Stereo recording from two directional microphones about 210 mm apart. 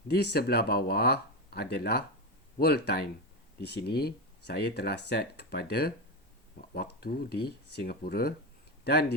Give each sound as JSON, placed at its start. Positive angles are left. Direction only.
{"t": 0.1, "sound": "speech", "side_deg": 50}